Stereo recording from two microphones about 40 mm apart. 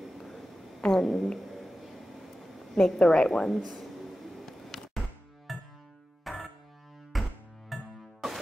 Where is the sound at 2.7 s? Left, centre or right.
Left.